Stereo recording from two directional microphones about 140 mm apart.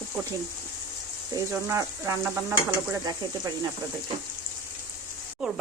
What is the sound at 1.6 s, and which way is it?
Stir, 20° right (ahead or behind).